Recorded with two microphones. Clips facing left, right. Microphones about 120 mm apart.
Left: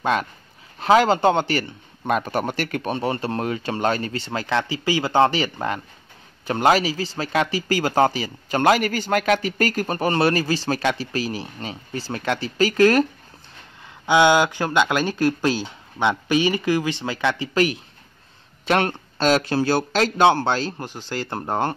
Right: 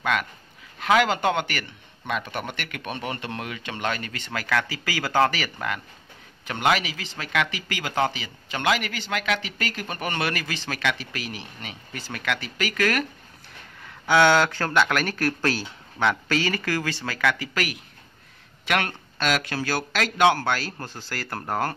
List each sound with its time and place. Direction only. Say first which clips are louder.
0.0 s speech: left 4 dB; 30° left (ahead or behind)
2.0 s speech: left 7 dB; 40° left (ahead or behind)
14.0 s speech: left 2 dB; 15° left (ahead or behind)